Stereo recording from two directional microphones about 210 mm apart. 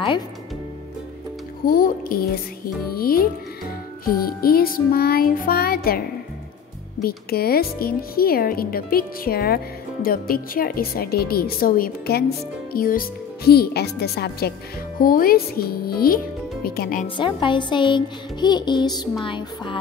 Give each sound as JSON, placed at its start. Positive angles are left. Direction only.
{"t": 1.7, "sound": "a woman's voice", "side_deg": 45}
{"t": 17.2, "sound": "a child's voice", "side_deg": 20}